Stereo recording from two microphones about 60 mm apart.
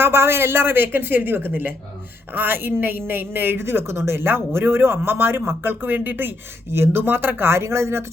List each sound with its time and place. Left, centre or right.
0.0 s a woman's voice: right